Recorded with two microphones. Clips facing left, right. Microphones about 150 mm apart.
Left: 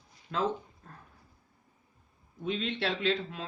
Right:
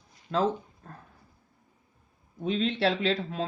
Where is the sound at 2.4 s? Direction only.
35° right (ahead or behind).